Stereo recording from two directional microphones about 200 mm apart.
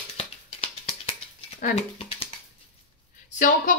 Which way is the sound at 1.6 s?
40° left (ahead or behind).